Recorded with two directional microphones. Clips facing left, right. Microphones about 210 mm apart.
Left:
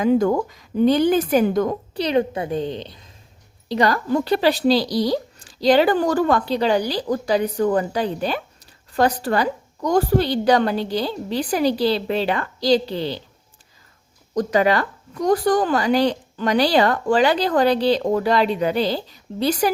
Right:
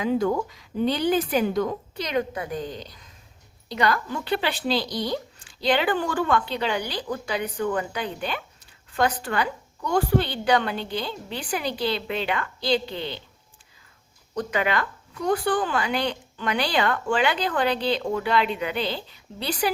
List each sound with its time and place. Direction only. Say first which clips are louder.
0.0 s a woman's voice: left 6 dB; 45° left (ahead or behind)
2.0 s a woman's voice: left 7 dB; 30° left (ahead or behind)
14.3 s speech: left 7 dB; 35° left (ahead or behind)